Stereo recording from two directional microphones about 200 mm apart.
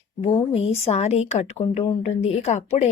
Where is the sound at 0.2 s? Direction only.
30° left (ahead or behind).